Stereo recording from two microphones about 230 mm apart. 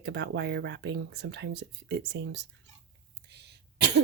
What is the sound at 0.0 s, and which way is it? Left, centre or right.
Speech, right.